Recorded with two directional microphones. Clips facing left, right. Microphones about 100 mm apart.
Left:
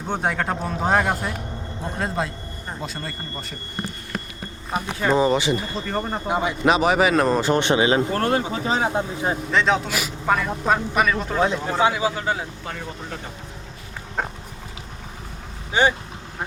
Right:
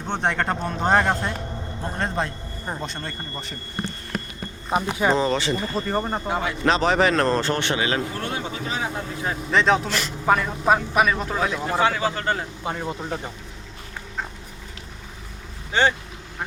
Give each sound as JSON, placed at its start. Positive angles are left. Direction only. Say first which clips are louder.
{"t": 0.1, "sound": "speech", "louder": "even", "side_deg": 5}
{"t": 4.7, "sound": "speech", "louder": "right 2 dB", "side_deg": -10}
{"t": 5.1, "sound": "a man's voice", "louder": "left 3 dB", "side_deg": 15}
{"t": 5.9, "sound": "speech", "louder": "even", "side_deg": -5}
{"t": 6.2, "sound": "a man's voice", "louder": "left 6 dB", "side_deg": 15}
{"t": 8.1, "sound": "speech", "louder": "left 8 dB", "side_deg": 50}
{"t": 8.6, "sound": "speech", "louder": "left 6 dB", "side_deg": 30}
{"t": 9.5, "sound": "speech", "louder": "right 3 dB", "side_deg": 0}
{"t": 11.3, "sound": "speech", "louder": "left 4 dB", "side_deg": 25}
{"t": 11.8, "sound": "a man's voice", "louder": "left 2 dB", "side_deg": 15}
{"t": 12.6, "sound": "speech", "louder": "right 4 dB", "side_deg": -20}
{"t": 14.2, "sound": "dog", "louder": "left 5 dB", "side_deg": 55}
{"t": 15.7, "sound": "a man's voice", "louder": "left 1 dB", "side_deg": 15}